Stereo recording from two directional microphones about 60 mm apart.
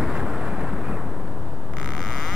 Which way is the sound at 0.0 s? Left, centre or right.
Centre.